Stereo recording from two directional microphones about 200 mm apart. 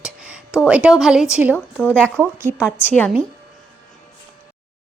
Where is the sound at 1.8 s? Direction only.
5° left (ahead or behind).